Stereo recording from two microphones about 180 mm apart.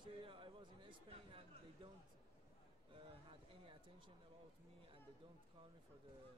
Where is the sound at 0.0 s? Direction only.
25° right (ahead or behind).